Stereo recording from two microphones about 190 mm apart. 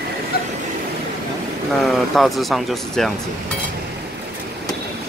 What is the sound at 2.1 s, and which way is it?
Speech, centre (ahead or behind).